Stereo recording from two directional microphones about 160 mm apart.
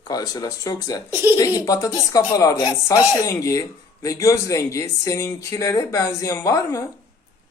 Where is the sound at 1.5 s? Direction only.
20° left (ahead or behind).